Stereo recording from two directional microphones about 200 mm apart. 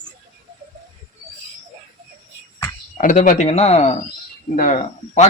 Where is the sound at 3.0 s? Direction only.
40° left (ahead or behind).